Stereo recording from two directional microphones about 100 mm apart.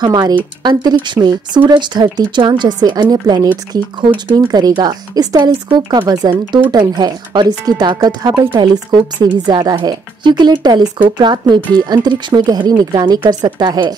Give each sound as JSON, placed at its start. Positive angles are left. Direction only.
{"t": 0.0, "sound": "speech", "side_deg": -45}
{"t": 5.7, "sound": "speech", "side_deg": -50}